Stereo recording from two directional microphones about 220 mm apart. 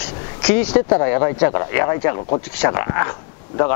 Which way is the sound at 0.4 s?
10° left (ahead or behind).